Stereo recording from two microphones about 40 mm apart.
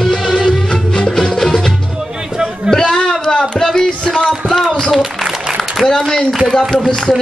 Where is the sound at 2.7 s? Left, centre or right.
Centre.